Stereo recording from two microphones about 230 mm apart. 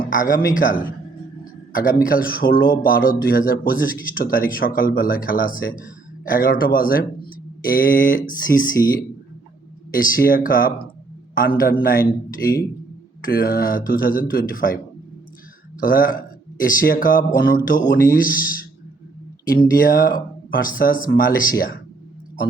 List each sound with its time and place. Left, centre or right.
0.0 s speech: left
15.8 s speech: left
19.6 s speech: left